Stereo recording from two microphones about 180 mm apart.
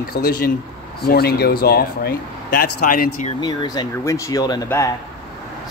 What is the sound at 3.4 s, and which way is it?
Speech, 25° left (ahead or behind).